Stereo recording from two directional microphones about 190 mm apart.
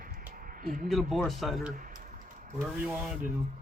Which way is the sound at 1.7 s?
45° right (ahead or behind).